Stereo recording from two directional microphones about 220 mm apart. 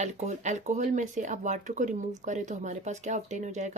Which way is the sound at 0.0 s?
30° right (ahead or behind).